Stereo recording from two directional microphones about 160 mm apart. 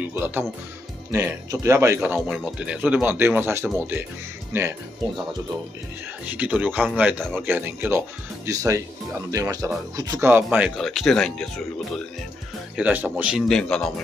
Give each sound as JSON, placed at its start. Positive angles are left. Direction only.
{"t": 0.0, "sound": "speech", "side_deg": -10}
{"t": 6.2, "sound": "speech", "side_deg": -10}
{"t": 10.3, "sound": "speech", "side_deg": -10}
{"t": 10.8, "sound": "a man's voice", "side_deg": 0}
{"t": 12.7, "sound": "a man's voice", "side_deg": -10}